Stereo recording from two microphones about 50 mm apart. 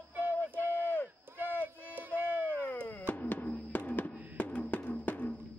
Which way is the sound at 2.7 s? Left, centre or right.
Left.